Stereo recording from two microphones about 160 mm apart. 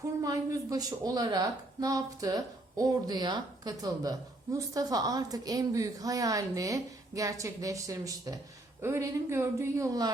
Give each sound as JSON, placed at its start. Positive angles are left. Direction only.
{"t": 0.2, "sound": "a woman's voice", "side_deg": -20}